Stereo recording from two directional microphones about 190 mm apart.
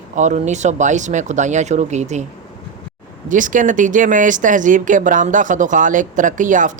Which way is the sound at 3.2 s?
45° right (ahead or behind).